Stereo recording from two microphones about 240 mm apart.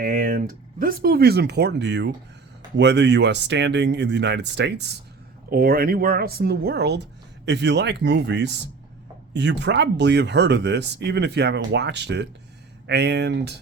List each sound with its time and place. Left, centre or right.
0.0 s speech: right